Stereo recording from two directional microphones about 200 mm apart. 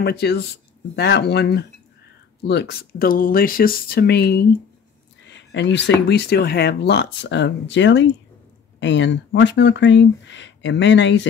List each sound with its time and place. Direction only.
0.0 s speech: 55° left (ahead or behind)